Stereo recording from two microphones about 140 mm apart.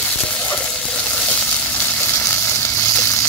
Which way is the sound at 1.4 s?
10° left (ahead or behind).